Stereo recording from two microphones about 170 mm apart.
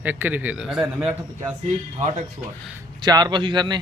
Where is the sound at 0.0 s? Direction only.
10° right (ahead or behind).